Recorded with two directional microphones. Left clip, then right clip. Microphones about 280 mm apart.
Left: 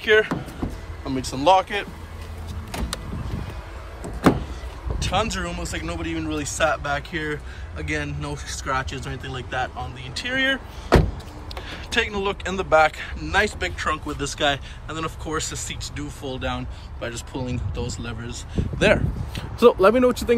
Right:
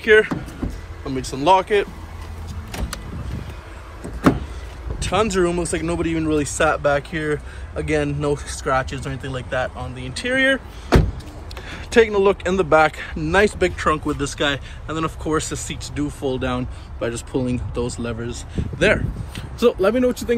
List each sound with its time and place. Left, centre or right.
0.0 s speech: centre
4.9 s speech: centre
11.7 s speech: centre
19.6 s speech: left